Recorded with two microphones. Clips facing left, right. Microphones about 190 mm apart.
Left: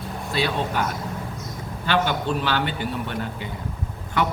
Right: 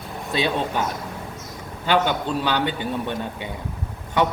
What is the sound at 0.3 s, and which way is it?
Speech, 20° right (ahead or behind).